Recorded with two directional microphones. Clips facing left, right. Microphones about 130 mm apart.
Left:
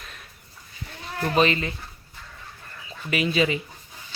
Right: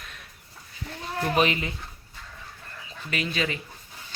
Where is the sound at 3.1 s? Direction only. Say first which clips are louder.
Left 6 dB; 5° left (ahead or behind).